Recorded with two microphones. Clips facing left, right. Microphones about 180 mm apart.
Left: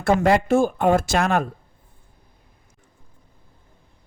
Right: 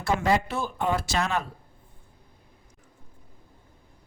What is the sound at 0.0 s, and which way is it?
Speech, 55° left (ahead or behind).